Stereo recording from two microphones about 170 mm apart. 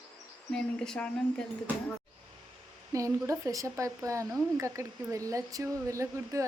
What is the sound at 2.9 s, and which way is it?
Speech, 20° right (ahead or behind).